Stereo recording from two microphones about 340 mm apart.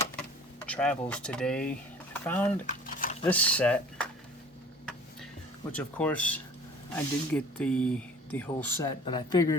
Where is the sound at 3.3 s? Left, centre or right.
Centre.